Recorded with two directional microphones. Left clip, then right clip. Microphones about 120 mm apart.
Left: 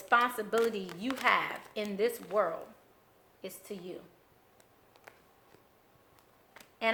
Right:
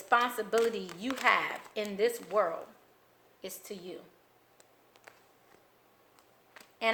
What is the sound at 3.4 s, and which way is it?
Speech, 25° right (ahead or behind).